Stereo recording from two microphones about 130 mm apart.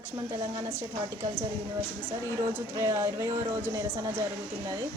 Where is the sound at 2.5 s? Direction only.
20° right (ahead or behind).